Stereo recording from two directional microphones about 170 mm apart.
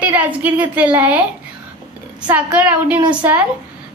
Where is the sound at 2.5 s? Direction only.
10° right (ahead or behind).